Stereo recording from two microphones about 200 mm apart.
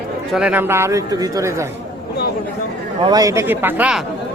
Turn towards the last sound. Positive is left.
turn(degrees=-5)  # may be behind; listen again after turning